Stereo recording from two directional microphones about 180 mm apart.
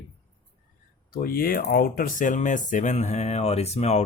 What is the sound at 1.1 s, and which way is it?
Speech, 55° left (ahead or behind).